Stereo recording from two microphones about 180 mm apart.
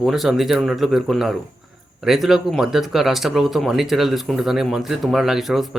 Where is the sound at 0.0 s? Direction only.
Centre (ahead or behind).